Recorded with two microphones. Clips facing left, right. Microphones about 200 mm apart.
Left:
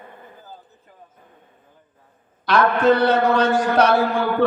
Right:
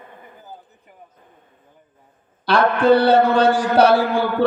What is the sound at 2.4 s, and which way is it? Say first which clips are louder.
A man's voice: right 1 dB; 30° right (ahead or behind).